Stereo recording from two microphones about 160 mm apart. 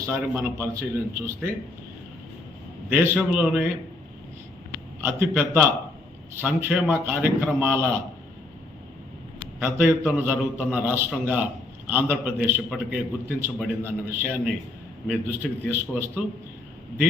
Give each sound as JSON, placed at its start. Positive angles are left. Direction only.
{"t": 0.0, "sound": "a man's voice", "side_deg": -15}
{"t": 2.9, "sound": "a man's voice", "side_deg": -10}
{"t": 4.9, "sound": "a man's voice", "side_deg": -15}
{"t": 9.6, "sound": "a man's voice", "side_deg": -10}